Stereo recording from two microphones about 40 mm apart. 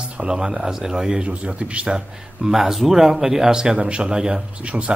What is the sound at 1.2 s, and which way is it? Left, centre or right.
Speech, right.